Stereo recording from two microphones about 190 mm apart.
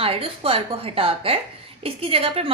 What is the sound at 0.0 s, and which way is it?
A woman's voice, 30° right (ahead or behind).